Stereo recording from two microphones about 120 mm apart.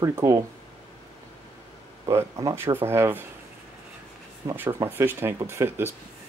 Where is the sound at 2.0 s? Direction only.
25° right (ahead or behind).